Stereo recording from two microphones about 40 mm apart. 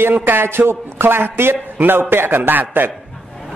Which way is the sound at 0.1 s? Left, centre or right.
Right.